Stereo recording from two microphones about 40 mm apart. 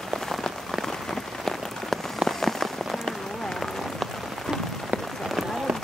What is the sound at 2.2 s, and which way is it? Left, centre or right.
Rain on surface, centre.